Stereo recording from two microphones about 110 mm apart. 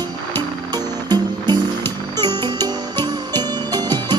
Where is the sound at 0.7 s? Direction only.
40° right (ahead or behind).